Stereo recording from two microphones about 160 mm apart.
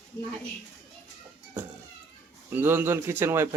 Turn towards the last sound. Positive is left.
turn(degrees=-15)  # may be behind; listen again after turning